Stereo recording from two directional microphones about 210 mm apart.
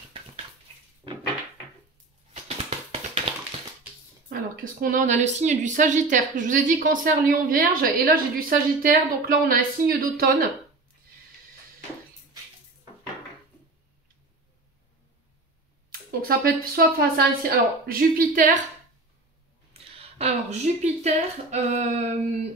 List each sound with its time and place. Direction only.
2.3 s a sound: 30° right (ahead or behind)
4.3 s speech: 45° right (ahead or behind)
15.9 s speech: 45° right (ahead or behind)
19.7 s speech: 30° right (ahead or behind)